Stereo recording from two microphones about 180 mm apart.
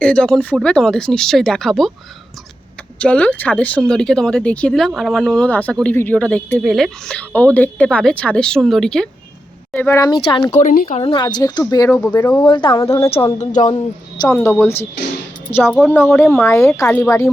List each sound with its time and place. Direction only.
0.0 s speech: 5° left (ahead or behind)
3.0 s speech: 5° left (ahead or behind)
9.7 s speech: 15° left (ahead or behind)
10.5 s speech: 45° left (ahead or behind)
11.0 s speech: 25° left (ahead or behind)
12.8 s speech: 15° left (ahead or behind)
13.4 s speech: 40° left (ahead or behind)
13.7 s a woman's voice: 20° left (ahead or behind)
14.3 s speech: 10° left (ahead or behind)